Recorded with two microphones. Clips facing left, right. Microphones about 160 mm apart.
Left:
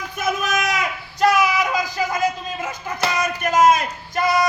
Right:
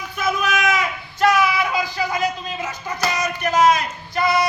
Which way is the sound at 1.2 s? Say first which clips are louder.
Even; 40° left (ahead or behind).